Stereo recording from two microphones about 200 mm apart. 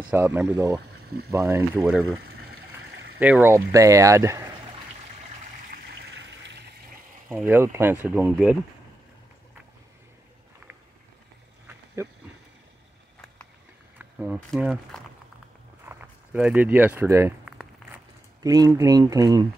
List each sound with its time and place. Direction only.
0.1 s speech: 10° right (ahead or behind)
1.8 s speech: 5° right (ahead or behind)
3.2 s speech: 10° right (ahead or behind)
5.7 s water: 60° right (ahead or behind)
7.2 s speech: 10° right (ahead or behind)
11.6 s wild animals: 15° right (ahead or behind)
13.9 s speech: 5° right (ahead or behind)
17.5 s crumpling: 5° right (ahead or behind)
18.4 s speech: 20° right (ahead or behind)